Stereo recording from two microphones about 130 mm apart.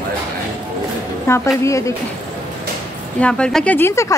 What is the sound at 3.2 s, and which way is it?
Speech, 5° left (ahead or behind).